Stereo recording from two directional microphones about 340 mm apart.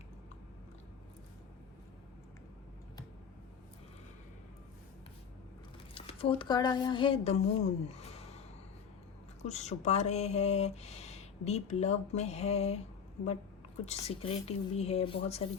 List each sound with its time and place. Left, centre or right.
5.9 s speech: centre
7.9 s a sound: centre
9.4 s speech: centre